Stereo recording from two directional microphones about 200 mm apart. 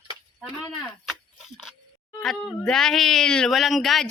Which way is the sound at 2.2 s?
Centre (ahead or behind).